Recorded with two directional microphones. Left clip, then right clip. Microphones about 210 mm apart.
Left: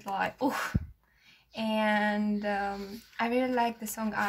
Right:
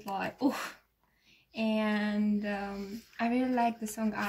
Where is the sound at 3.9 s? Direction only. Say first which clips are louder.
Left 1 dB; 20° left (ahead or behind).